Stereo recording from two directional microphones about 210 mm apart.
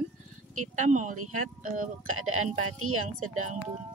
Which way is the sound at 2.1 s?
90° right.